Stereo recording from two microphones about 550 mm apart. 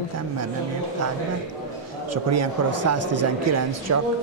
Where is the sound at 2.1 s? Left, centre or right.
Right.